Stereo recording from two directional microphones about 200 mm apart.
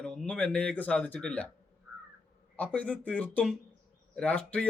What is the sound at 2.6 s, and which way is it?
A man's voice, 5° left (ahead or behind).